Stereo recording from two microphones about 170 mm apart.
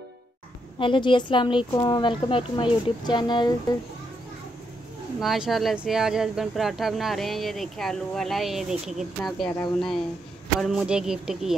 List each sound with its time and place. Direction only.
0.7 s speech: 30° left (ahead or behind)
5.2 s speech: centre (ahead or behind)